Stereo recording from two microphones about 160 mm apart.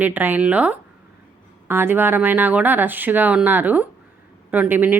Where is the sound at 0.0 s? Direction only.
10° right (ahead or behind).